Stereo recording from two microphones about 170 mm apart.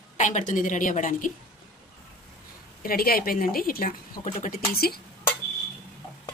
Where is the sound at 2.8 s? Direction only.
60° left (ahead or behind).